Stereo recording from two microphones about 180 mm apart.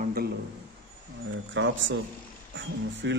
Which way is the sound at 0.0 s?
55° right (ahead or behind).